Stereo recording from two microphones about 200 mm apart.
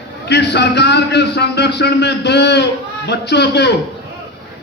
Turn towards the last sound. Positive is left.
turn(degrees=55)  # may be behind; listen again after turning